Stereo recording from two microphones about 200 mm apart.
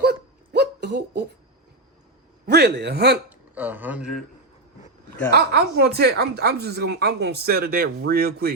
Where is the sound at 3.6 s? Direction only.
10° right (ahead or behind).